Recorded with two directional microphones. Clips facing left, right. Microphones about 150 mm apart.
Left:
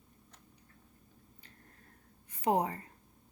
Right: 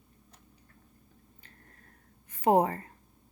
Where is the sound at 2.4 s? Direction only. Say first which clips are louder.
Right 6 dB; 55° right (ahead or behind).